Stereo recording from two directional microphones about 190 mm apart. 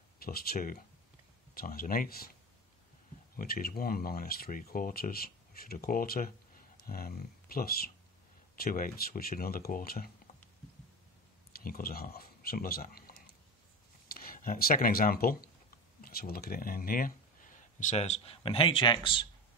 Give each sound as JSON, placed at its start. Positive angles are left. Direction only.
{"t": 0.2, "sound": "speech", "side_deg": 55}
{"t": 3.3, "sound": "speech", "side_deg": 50}
{"t": 11.6, "sound": "speech", "side_deg": 50}
{"t": 14.1, "sound": "speech", "side_deg": 50}